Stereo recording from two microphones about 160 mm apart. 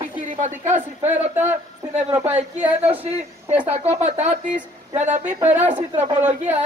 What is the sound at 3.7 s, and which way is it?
Speech, 45° right (ahead or behind).